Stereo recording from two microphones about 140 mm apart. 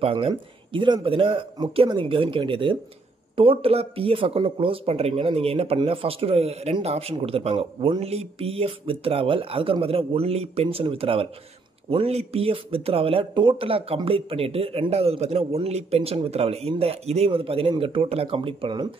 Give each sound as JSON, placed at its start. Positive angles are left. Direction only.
{"t": 0.0, "sound": "speech", "side_deg": -40}